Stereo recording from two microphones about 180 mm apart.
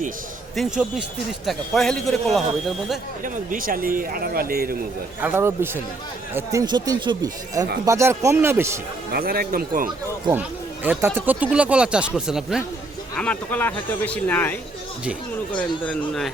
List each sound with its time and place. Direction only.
0.5 s speech: centre (ahead or behind)
3.5 s speech: 50° right (ahead or behind)
5.2 s speech: 10° right (ahead or behind)
9.1 s speech: 55° right (ahead or behind)
10.8 s speech: 10° right (ahead or behind)
13.1 s speech: 10° left (ahead or behind)
15.5 s speech: 5° left (ahead or behind)